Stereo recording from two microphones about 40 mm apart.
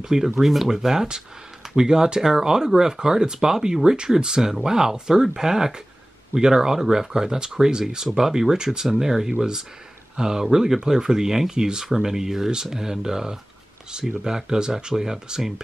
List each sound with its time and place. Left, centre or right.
0.0 s speech: centre